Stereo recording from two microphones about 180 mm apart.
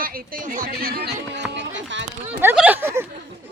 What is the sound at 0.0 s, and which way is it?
Speech, 50° right (ahead or behind).